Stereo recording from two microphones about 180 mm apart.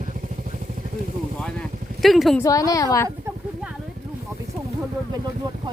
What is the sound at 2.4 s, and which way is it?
Speech, 20° left (ahead or behind).